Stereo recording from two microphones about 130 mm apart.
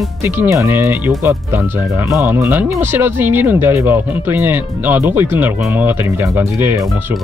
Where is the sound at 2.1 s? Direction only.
20° right (ahead or behind).